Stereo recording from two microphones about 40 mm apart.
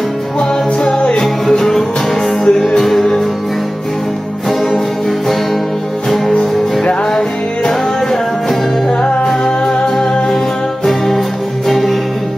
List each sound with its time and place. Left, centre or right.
0.4 s music: left; by 3.2 s centre
6.0 s music: centre
6.3 s music: left
7.1 s music: centre